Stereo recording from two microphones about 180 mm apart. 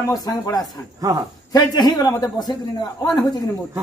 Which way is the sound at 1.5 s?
20° left (ahead or behind).